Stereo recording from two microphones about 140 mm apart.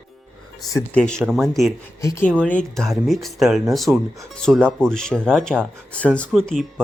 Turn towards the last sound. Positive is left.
turn(degrees=0)  # may be behind; listen again after turning